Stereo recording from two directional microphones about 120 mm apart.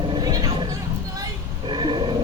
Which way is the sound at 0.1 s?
35° right (ahead or behind).